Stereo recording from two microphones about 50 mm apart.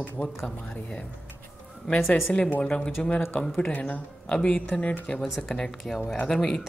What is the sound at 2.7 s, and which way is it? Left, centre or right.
Speech, centre.